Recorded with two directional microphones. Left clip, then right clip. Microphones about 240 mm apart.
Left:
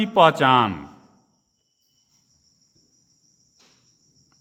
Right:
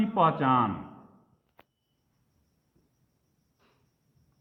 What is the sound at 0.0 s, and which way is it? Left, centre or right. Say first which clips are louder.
Speech: left 9 dB; left.